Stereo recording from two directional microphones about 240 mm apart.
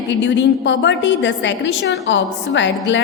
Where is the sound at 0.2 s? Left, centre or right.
Left.